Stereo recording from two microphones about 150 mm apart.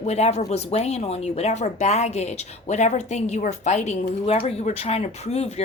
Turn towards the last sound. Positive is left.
turn(degrees=45)  # may be behind; listen again after turning